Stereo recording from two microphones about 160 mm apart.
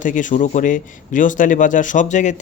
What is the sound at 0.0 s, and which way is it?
Speech, 55° left (ahead or behind).